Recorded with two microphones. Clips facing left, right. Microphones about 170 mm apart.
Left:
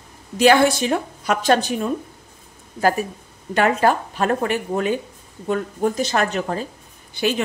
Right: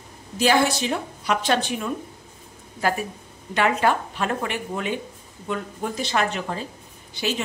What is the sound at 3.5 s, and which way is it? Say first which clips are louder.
A woman's voice: left 3 dB; 45° left (ahead or behind).